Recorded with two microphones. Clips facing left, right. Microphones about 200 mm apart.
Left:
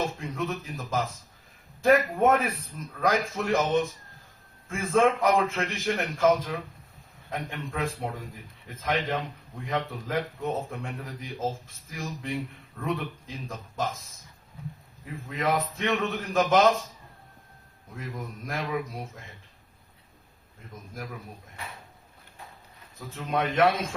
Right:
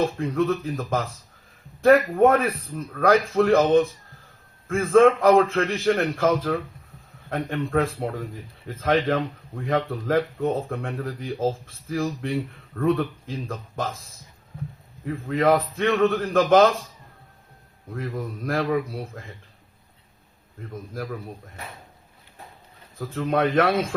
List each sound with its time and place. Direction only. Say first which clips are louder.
0.2 s speech: right 9 dB; 55° right (ahead or behind)
15.3 s speech: right 7 dB; 60° right (ahead or behind)
17.9 s speech: right 7 dB; 55° right (ahead or behind)
23.1 s speech: right 6 dB; 60° right (ahead or behind)